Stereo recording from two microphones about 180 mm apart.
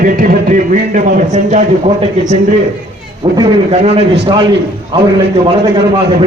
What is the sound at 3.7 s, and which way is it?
Speech, 35° right (ahead or behind).